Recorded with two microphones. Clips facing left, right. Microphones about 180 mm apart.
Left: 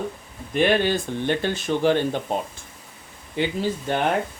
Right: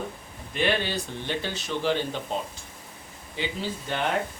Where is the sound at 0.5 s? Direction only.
50° left (ahead or behind).